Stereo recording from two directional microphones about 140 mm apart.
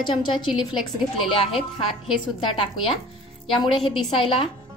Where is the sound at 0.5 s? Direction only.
Centre (ahead or behind).